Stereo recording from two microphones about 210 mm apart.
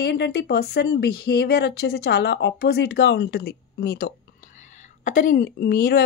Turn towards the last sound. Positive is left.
turn(degrees=45)  # may be behind; listen again after turning